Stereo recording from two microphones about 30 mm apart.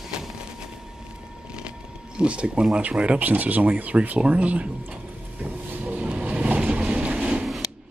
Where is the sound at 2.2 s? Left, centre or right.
Right.